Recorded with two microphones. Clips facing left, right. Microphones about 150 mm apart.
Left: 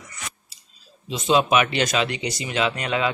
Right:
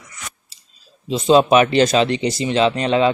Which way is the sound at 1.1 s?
35° right (ahead or behind).